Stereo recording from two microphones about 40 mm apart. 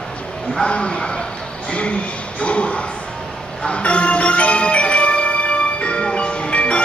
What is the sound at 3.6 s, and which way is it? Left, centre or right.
Music, left.